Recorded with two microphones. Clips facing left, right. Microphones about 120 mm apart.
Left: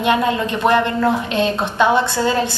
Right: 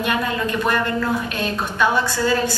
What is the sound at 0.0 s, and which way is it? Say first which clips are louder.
A woman's voice: left 5 dB; 25° left (ahead or behind).